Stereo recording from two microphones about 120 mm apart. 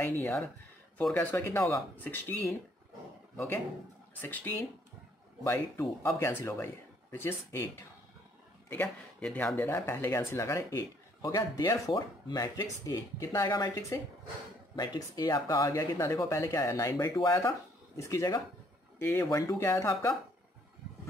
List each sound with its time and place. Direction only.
0.0 s speech: 15° left (ahead or behind)
8.6 s speech: 15° left (ahead or behind)